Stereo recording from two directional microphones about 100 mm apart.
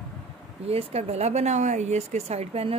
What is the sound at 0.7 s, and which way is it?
Speech, 90° right.